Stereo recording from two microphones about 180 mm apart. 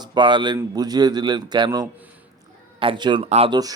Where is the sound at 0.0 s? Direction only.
25° right (ahead or behind).